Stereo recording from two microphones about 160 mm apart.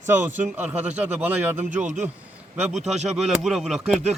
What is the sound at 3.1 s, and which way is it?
Speech, 5° right (ahead or behind).